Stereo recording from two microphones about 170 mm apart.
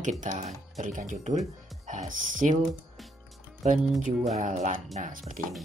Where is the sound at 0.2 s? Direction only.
45° right (ahead or behind).